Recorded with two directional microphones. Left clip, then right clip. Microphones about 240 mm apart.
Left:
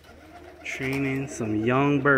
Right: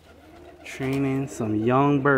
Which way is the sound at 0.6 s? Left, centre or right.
Centre.